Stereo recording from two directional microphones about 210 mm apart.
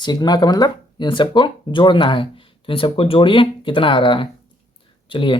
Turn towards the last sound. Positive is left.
turn(degrees=25)  # may be behind; listen again after turning